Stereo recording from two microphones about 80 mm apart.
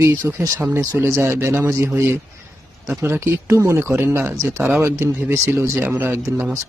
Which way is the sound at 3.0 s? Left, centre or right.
Right.